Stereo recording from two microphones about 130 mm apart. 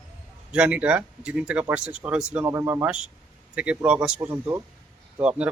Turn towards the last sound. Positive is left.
turn(degrees=-10)  # may be behind; listen again after turning